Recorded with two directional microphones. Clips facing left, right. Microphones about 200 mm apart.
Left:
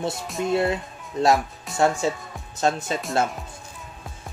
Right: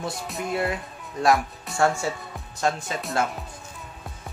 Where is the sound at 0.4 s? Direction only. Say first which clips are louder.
Left 5 dB; 25° left (ahead or behind).